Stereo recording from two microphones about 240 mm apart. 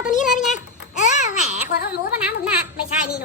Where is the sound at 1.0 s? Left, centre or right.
Left.